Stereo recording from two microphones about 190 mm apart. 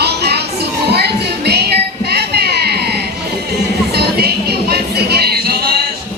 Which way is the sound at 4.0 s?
55° right (ahead or behind).